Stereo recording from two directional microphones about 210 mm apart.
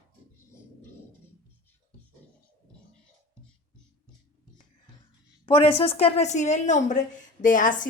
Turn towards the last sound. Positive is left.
turn(degrees=40)  # may be behind; listen again after turning